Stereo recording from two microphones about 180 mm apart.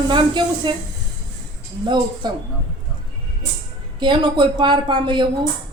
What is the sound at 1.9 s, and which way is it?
Speech, 25° right (ahead or behind).